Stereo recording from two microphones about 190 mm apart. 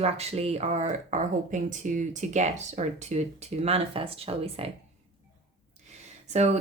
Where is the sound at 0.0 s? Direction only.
35° right (ahead or behind).